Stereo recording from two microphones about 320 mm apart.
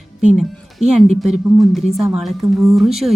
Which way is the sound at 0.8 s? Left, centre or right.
Right.